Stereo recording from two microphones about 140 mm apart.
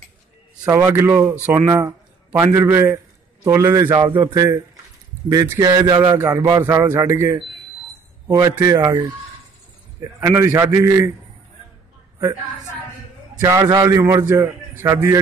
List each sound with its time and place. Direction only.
0.7 s a man's voice: 20° right (ahead or behind)
10.2 s a man's voice: 20° right (ahead or behind)
13.4 s a man's voice: 25° right (ahead or behind)